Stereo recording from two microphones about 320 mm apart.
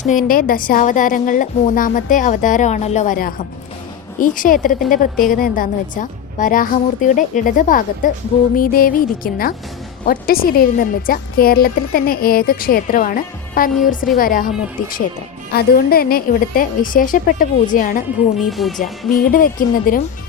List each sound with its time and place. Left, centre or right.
0.0 s a woman's voice: left
15.5 s a woman's voice: left
18.4 s speech: centre
18.8 s a woman's voice: left